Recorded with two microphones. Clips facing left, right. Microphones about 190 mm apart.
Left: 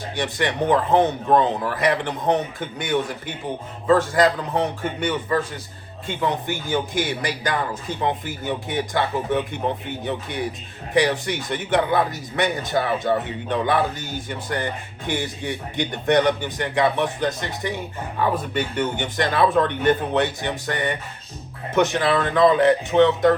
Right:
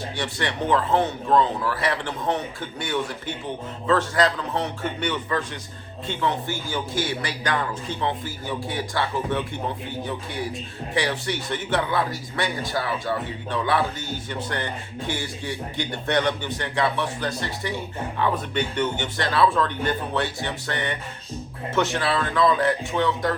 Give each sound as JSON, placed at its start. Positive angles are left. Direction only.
{"t": 0.2, "sound": "speech", "side_deg": 15}